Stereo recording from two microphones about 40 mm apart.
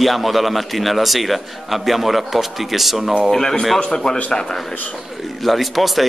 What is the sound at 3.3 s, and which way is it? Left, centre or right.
Speech, centre.